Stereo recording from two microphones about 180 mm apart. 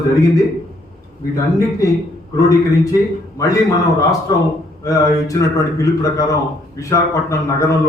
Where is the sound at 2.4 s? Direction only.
20° left (ahead or behind).